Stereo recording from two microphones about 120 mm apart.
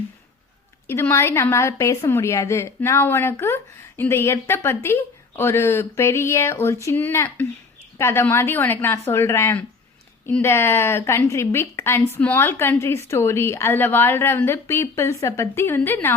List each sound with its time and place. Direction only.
0.9 s a woman's voice: 20° left (ahead or behind)